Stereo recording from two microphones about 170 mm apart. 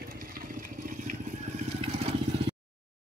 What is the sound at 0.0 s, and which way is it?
Vehicle, 60° right (ahead or behind).